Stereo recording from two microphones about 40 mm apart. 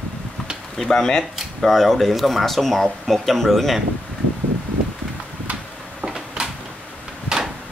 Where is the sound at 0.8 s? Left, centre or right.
Centre.